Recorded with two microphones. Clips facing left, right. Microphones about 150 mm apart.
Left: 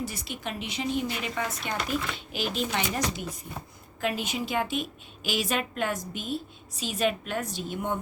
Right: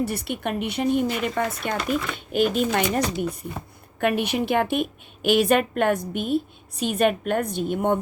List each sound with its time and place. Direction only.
0.0 s a woman's voice: 60° right (ahead or behind)
4.0 s a woman's voice: 65° right (ahead or behind)